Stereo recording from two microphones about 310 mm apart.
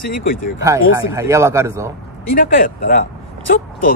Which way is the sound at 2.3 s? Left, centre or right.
Left.